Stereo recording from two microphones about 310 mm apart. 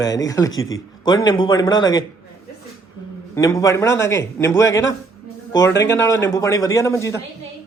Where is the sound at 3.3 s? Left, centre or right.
Centre.